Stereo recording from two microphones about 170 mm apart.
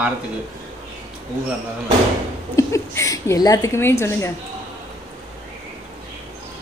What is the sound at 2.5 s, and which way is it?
A woman's voice, 15° left (ahead or behind).